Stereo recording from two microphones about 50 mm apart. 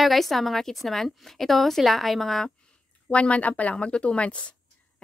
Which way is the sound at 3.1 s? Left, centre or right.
Left.